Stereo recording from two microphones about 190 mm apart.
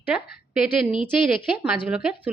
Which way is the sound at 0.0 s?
5° right (ahead or behind).